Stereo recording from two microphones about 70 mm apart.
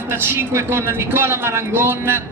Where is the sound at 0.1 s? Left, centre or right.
Right.